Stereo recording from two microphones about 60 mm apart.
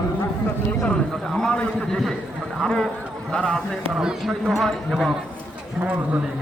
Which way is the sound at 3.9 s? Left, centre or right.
Centre.